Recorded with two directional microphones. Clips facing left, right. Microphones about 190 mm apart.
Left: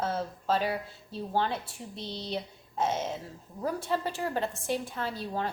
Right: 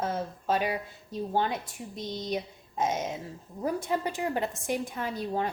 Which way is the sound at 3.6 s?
15° right (ahead or behind).